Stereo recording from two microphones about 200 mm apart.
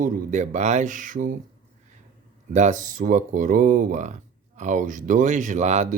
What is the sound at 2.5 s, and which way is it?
Speech, 35° right (ahead or behind).